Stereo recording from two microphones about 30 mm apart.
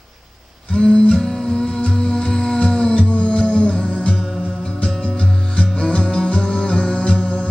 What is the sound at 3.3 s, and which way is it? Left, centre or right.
Music, left.